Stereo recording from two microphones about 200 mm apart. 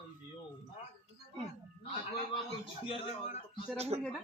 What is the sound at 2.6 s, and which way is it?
A man's voice, 30° left (ahead or behind).